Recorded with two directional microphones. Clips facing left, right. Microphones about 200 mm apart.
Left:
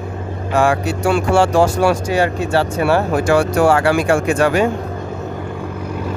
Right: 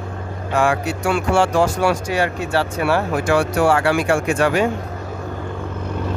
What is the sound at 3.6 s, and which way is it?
Speech, 40° left (ahead or behind).